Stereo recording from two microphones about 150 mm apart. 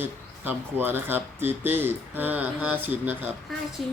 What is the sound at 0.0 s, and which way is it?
Speech, 15° right (ahead or behind).